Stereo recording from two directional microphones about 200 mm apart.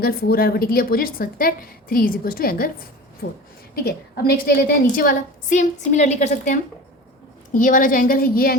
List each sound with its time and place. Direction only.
0.0 s a woman's voice: 50° left (ahead or behind)